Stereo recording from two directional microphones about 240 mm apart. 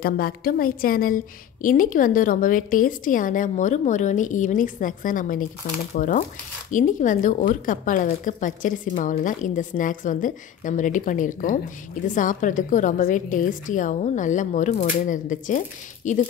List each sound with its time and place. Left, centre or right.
0.0 s a woman's voice: left